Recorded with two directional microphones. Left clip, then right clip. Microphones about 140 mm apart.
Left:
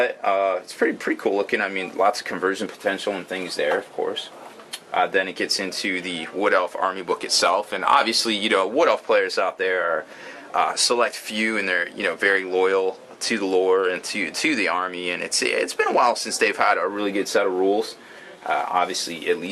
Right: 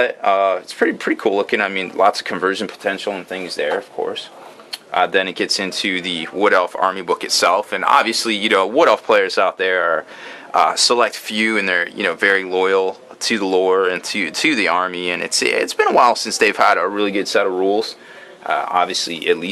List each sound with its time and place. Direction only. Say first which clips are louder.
0.0 s speech: right 5 dB; 25° right (ahead or behind)
1.3 s speech: right 5 dB; 20° right (ahead or behind)
16.4 s speech: right 6 dB; 25° right (ahead or behind)
17.0 s speech: right 4 dB; 15° right (ahead or behind)